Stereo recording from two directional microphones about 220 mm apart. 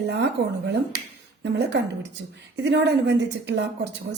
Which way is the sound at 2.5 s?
50° right (ahead or behind).